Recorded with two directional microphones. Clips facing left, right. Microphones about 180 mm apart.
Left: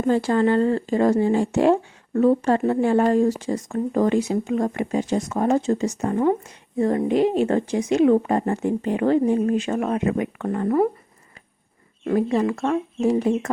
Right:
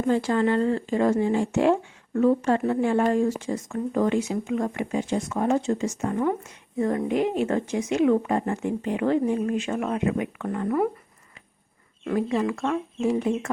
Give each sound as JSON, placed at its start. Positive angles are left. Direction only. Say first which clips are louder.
{"t": 0.1, "sound": "speech", "louder": "left 4 dB", "side_deg": 40}
{"t": 12.0, "sound": "speech", "louder": "left 4 dB", "side_deg": 40}